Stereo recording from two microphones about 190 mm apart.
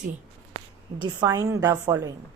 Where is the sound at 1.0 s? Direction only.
25° right (ahead or behind).